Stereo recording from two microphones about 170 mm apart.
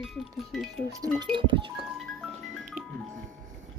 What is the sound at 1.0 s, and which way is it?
Speech, 25° right (ahead or behind).